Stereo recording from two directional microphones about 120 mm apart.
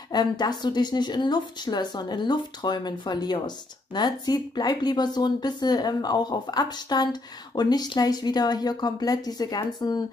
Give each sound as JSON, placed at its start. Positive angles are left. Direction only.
{"t": 0.1, "sound": "speech", "side_deg": 35}